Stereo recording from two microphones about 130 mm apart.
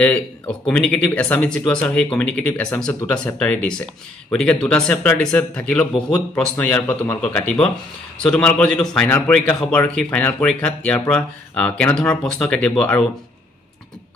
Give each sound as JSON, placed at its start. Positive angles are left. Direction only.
{"t": 0.7, "sound": "a man's voice", "side_deg": 5}